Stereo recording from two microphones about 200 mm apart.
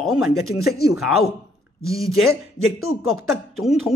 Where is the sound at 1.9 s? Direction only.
Centre (ahead or behind).